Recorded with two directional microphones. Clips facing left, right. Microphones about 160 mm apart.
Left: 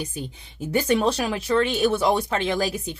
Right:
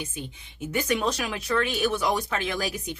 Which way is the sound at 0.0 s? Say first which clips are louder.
Left 4 dB; 35° left (ahead or behind).